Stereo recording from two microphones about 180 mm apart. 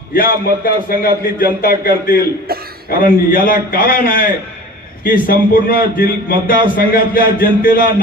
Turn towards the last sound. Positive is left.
turn(degrees=50)  # may be behind; listen again after turning